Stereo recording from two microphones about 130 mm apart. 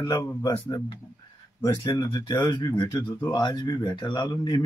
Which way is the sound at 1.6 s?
35° left (ahead or behind).